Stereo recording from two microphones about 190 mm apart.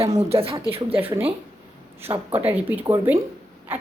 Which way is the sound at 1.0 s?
10° right (ahead or behind).